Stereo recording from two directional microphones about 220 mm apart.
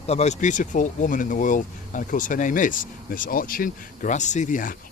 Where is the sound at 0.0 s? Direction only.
30° left (ahead or behind).